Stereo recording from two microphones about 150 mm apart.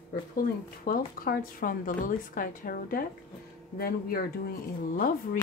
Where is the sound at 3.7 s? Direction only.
90° left.